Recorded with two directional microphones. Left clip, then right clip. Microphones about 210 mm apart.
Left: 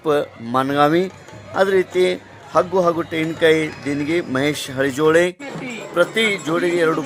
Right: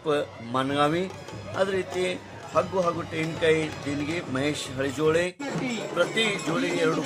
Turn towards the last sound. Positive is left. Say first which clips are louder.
# left 8 dB
turn(degrees=40)  # may be behind; listen again after turning